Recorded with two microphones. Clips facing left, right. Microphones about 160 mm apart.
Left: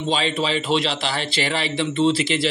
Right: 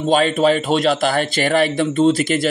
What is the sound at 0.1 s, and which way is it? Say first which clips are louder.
A man's voice: right 8 dB; 50° right (ahead or behind).